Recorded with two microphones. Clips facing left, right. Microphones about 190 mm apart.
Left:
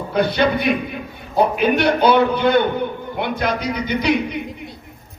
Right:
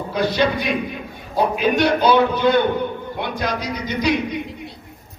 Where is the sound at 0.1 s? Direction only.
55° left (ahead or behind).